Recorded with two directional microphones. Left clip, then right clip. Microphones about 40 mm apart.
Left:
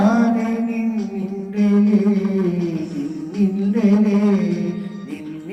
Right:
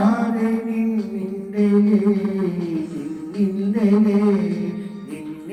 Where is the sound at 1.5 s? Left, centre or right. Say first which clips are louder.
Even; left.